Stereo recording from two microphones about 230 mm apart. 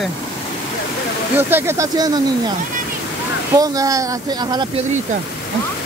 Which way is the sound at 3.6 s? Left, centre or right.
Centre.